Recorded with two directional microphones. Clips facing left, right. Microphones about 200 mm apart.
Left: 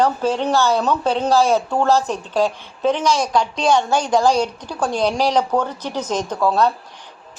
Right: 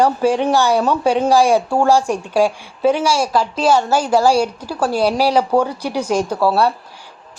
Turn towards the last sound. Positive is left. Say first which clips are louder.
# right 2 dB
turn(degrees=-10)  # may be behind; listen again after turning